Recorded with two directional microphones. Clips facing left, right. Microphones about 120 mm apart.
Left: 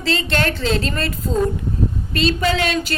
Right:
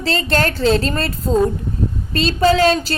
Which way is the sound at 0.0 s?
40° right (ahead or behind).